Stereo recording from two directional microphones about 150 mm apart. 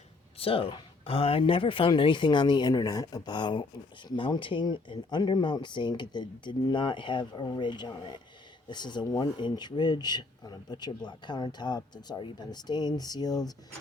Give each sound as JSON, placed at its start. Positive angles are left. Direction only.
{"t": 0.3, "sound": "speech", "side_deg": 40}